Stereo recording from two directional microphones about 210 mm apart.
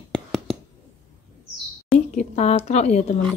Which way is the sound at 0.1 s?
Centre (ahead or behind).